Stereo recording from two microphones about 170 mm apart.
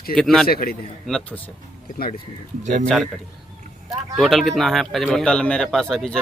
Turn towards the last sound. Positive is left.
turn(degrees=5)  # may be behind; listen again after turning